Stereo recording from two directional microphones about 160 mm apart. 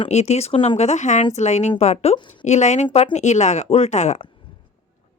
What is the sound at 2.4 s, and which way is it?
Speech, 45° left (ahead or behind).